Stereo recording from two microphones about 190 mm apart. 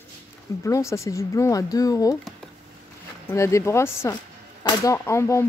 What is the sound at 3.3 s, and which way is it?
Speech, 15° left (ahead or behind).